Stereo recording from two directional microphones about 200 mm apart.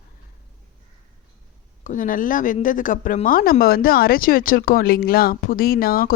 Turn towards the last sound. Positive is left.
turn(degrees=45)  # may be behind; listen again after turning